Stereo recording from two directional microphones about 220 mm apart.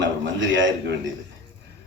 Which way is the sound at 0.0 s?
55° right (ahead or behind).